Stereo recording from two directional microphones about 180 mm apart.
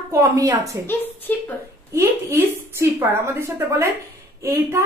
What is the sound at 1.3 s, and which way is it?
Speech, 10° left (ahead or behind).